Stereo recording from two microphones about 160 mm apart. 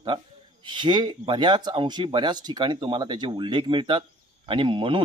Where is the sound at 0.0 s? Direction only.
30° right (ahead or behind).